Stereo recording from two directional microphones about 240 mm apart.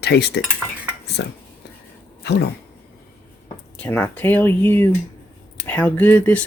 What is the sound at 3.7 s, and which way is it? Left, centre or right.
Speech, centre.